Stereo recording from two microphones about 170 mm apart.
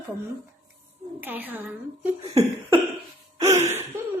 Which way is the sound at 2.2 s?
35° right (ahead or behind).